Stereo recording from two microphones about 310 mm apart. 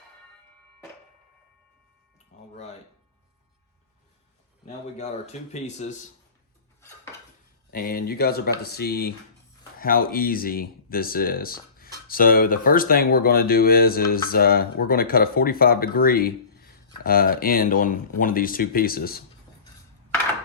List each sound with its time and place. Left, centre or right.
2.3 s a sound: left
4.9 s speech: left
7.7 s speech: left